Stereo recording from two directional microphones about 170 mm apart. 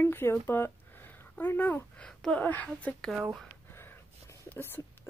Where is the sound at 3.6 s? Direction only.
15° left (ahead or behind).